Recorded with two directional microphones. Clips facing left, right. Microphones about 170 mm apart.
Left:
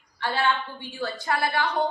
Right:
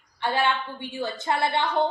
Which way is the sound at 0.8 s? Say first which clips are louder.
Right 1 dB; 20° right (ahead or behind).